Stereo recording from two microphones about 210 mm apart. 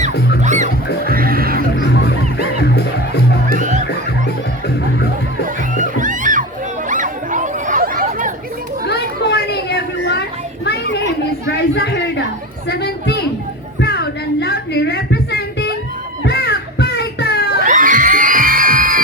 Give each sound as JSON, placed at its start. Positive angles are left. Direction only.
{"t": 0.4, "sound": "music", "side_deg": -35}
{"t": 1.7, "sound": "music", "side_deg": 55}
{"t": 3.4, "sound": "music", "side_deg": -35}
{"t": 5.7, "sound": "music", "side_deg": -40}
{"t": 6.8, "sound": "a sound", "side_deg": -40}
{"t": 8.9, "sound": "children playing", "side_deg": 55}
{"t": 11.4, "sound": "a sound", "side_deg": 55}
{"t": 12.6, "sound": "chatter", "side_deg": 50}
{"t": 13.7, "sound": "a sound", "side_deg": 50}
{"t": 17.6, "sound": "crowd", "side_deg": -40}